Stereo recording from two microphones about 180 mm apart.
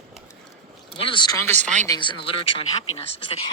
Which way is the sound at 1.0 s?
25° left (ahead or behind).